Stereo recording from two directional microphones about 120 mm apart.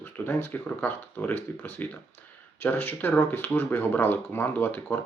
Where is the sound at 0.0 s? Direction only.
15° left (ahead or behind).